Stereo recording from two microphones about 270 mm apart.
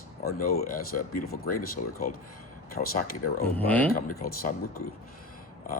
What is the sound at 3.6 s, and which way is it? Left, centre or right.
Speech, centre.